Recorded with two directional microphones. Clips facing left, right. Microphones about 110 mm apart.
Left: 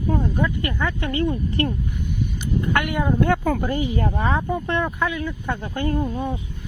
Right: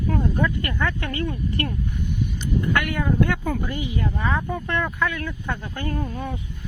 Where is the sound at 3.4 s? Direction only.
55° left (ahead or behind).